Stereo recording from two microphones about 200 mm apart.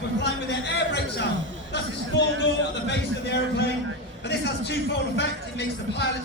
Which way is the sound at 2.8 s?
60° left (ahead or behind).